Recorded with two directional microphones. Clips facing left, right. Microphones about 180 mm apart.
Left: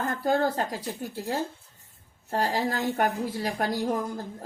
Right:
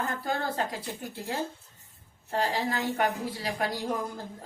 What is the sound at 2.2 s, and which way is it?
A woman's voice, 40° left (ahead or behind).